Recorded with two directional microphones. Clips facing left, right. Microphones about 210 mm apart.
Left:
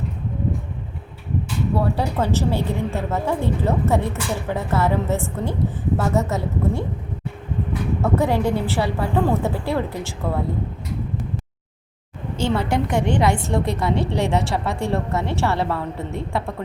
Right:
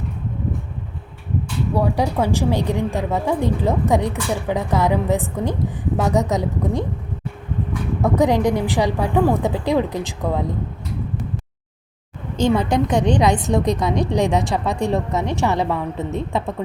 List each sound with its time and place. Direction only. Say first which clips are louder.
1.7 s a woman's voice: right 3 dB; 15° right (ahead or behind)
8.0 s a woman's voice: right 4 dB; 15° right (ahead or behind)
12.4 s a woman's voice: right 4 dB; 15° right (ahead or behind)